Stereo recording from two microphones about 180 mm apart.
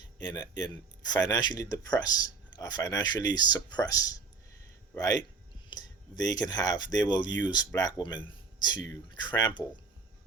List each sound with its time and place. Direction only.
0.3 s speech: 20° left (ahead or behind)